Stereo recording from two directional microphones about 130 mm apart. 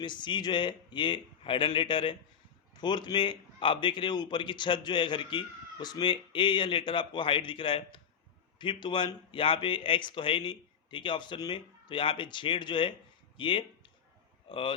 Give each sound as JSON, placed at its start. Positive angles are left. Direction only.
{"t": 0.0, "sound": "a man's voice", "side_deg": 35}